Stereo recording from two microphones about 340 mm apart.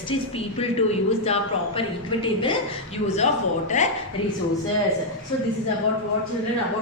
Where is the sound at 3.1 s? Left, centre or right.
Centre.